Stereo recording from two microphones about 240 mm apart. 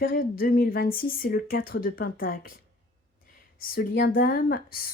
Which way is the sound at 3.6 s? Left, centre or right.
Left.